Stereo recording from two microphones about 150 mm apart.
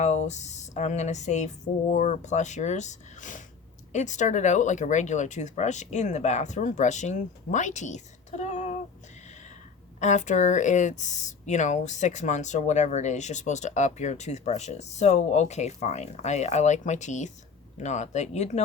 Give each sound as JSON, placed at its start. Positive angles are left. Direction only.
{"t": 0.0, "sound": "speech", "side_deg": 50}
{"t": 10.0, "sound": "speech", "side_deg": 50}